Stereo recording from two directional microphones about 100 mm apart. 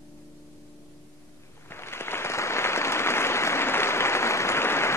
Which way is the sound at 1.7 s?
25° left (ahead or behind).